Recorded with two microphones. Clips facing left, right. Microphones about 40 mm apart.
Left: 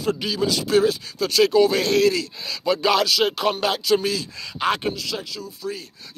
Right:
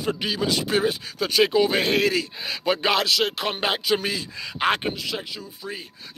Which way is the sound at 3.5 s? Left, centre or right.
Right.